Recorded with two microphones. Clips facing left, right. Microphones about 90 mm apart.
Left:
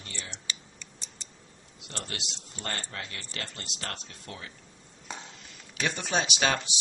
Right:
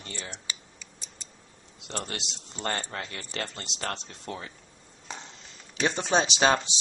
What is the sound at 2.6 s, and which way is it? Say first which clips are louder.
Speech: right 5 dB; 35° right (ahead or behind).